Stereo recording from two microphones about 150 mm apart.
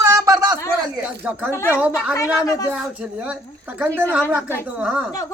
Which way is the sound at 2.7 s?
10° right (ahead or behind).